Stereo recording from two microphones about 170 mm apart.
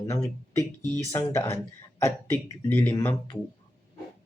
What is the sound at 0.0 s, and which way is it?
Speech, 20° left (ahead or behind).